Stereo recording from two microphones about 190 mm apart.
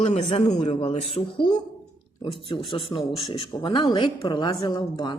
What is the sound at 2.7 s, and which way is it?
A woman's voice, 25° left (ahead or behind).